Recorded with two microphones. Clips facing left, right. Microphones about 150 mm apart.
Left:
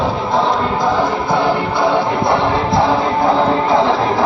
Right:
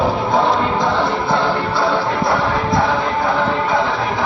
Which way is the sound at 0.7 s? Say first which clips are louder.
Left 2 dB; 10° left (ahead or behind).